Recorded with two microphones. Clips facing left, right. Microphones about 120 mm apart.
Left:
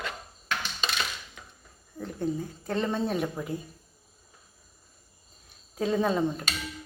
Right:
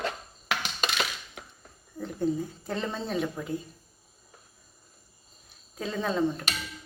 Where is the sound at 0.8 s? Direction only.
70° right (ahead or behind).